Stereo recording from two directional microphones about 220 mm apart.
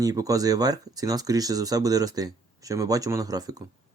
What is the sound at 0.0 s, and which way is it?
Speech, 15° right (ahead or behind).